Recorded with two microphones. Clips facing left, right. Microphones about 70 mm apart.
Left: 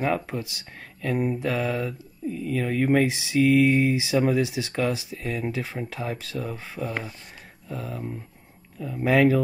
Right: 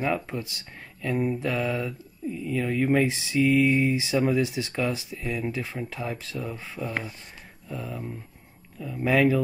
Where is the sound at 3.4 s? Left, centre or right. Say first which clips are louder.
Left 2 dB; left.